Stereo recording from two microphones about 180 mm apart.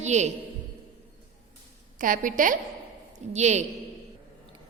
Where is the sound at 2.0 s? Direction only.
45° right (ahead or behind).